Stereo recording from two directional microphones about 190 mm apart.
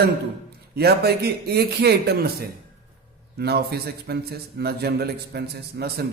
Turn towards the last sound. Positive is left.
turn(degrees=-55)  # may be behind; listen again after turning